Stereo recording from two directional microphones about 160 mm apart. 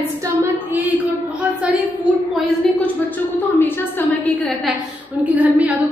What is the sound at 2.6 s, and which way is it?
A woman's voice, 5° left (ahead or behind).